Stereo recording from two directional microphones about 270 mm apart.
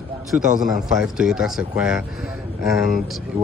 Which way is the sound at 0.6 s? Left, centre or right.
Centre.